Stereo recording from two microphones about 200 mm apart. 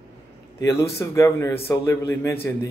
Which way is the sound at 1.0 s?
15° left (ahead or behind).